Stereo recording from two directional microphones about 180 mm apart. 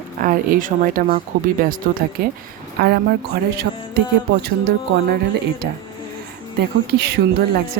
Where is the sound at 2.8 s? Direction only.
65° right (ahead or behind).